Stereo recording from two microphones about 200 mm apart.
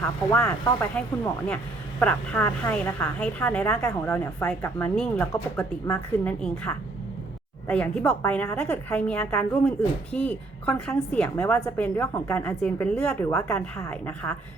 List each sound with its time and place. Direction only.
0.0 s a woman's voice: 10° left (ahead or behind)